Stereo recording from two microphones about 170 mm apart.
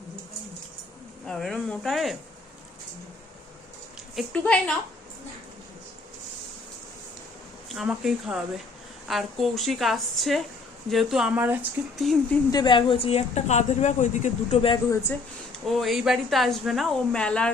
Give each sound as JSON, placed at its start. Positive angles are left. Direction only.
{"t": 1.2, "sound": "a woman's voice", "side_deg": 0}
{"t": 4.1, "sound": "a woman's voice", "side_deg": 0}
{"t": 7.7, "sound": "a woman's voice", "side_deg": 0}
{"t": 12.5, "sound": "speech", "side_deg": 25}
{"t": 14.8, "sound": "speech", "side_deg": 15}
{"t": 15.6, "sound": "a woman's voice", "side_deg": 0}